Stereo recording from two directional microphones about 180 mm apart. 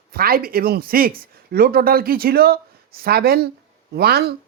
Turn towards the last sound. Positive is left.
turn(degrees=-60)  # may be behind; listen again after turning